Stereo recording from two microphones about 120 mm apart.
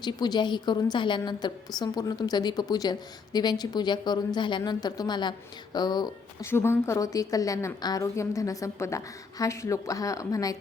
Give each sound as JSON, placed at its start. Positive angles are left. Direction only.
{"t": 0.0, "sound": "a woman's voice", "side_deg": 35}
{"t": 6.4, "sound": "a woman's voice", "side_deg": 20}